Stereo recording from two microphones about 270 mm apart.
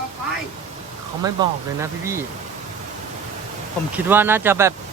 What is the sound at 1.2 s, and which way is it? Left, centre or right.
Speech, centre.